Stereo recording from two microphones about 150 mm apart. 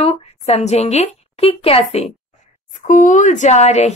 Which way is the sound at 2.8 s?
55° left (ahead or behind).